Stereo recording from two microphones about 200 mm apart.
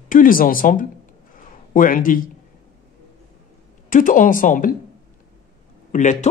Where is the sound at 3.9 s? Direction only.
40° left (ahead or behind).